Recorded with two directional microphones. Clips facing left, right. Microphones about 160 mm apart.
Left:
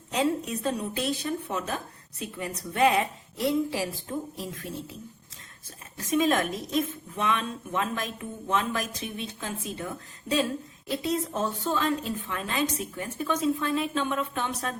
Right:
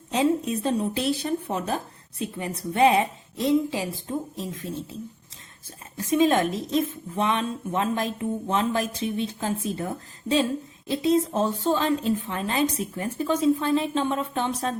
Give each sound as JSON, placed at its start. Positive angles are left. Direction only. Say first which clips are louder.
{"t": 0.1, "sound": "a woman's voice", "louder": "right 4 dB", "side_deg": -30}
{"t": 6.0, "sound": "a woman's voice", "louder": "right 4 dB", "side_deg": -30}